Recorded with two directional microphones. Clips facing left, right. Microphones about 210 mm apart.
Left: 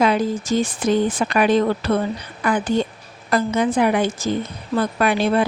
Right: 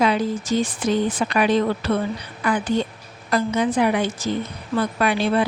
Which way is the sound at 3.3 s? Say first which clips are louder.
Left 2 dB; 50° left (ahead or behind).